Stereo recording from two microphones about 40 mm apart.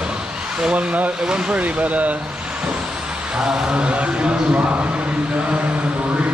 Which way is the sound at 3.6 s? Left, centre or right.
Right.